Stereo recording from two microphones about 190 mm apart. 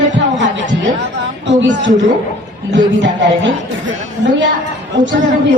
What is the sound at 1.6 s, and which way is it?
Speech, 75° right (ahead or behind).